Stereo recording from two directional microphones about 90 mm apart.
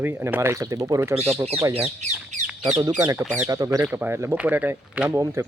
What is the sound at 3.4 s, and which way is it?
Speech, 40° right (ahead or behind).